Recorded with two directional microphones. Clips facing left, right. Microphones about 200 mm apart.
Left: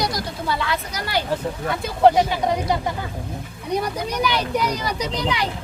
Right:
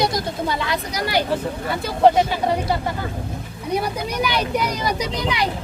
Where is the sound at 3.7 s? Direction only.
10° right (ahead or behind).